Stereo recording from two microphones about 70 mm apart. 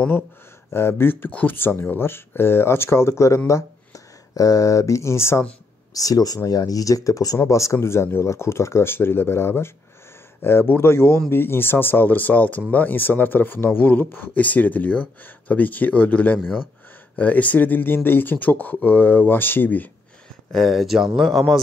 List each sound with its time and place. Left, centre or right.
0.7 s speech: left
5.9 s speech: left
20.5 s speech: centre